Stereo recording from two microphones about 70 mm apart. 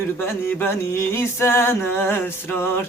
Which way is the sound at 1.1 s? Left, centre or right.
Left.